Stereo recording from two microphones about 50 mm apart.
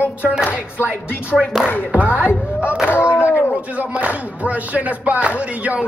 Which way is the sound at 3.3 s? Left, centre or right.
Left.